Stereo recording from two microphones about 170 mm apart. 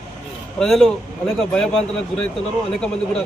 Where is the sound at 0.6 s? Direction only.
Centre (ahead or behind).